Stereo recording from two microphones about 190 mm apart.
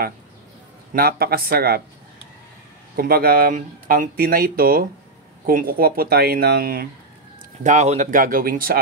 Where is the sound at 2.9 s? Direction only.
50° right (ahead or behind).